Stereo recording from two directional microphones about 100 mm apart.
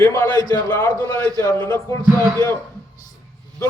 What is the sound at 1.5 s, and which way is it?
Speech, 50° right (ahead or behind).